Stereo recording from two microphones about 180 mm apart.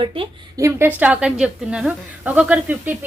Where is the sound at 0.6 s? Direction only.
10° right (ahead or behind).